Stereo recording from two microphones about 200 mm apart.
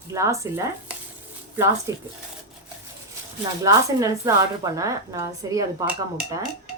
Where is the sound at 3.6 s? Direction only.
15° right (ahead or behind).